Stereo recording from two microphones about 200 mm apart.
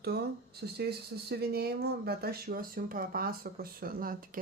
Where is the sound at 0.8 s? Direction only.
55° right (ahead or behind).